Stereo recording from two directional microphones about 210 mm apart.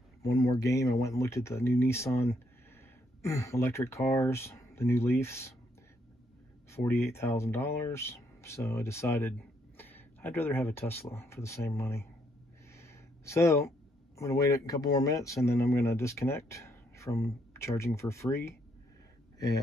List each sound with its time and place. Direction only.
0.2 s speech: 15° left (ahead or behind)
6.7 s speech: 10° left (ahead or behind)
19.3 s a sound: 15° left (ahead or behind)